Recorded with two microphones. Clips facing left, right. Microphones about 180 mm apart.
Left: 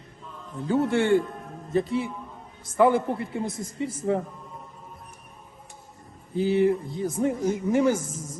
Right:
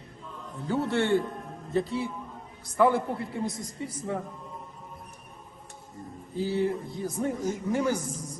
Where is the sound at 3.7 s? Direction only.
25° left (ahead or behind).